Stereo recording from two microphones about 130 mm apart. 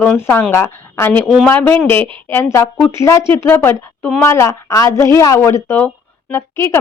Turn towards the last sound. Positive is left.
turn(degrees=20)  # may be behind; listen again after turning